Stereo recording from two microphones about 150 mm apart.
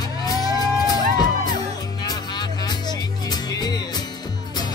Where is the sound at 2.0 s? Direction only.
30° left (ahead or behind).